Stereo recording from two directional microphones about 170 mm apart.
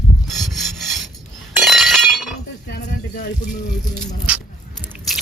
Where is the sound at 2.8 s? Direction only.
45° left (ahead or behind).